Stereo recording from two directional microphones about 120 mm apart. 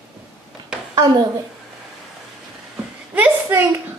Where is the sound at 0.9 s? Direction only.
30° right (ahead or behind).